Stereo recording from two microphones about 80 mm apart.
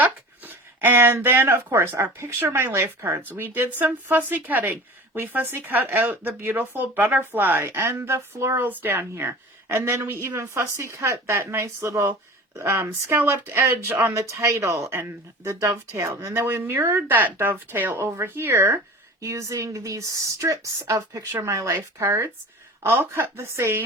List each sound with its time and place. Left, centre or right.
0.0 s speech: right
8.6 s a woman's voice: right